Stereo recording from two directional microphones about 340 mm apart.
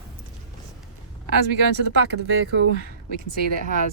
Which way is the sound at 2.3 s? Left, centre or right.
Right.